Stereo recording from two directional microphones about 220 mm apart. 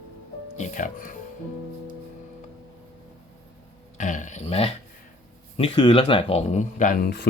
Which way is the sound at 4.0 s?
35° left (ahead or behind).